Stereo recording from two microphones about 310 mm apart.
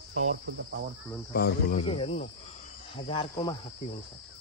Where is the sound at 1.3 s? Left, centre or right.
Left.